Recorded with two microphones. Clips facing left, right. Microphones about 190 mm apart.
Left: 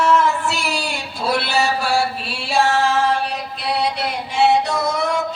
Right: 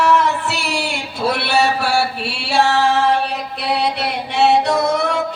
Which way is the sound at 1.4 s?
65° right (ahead or behind).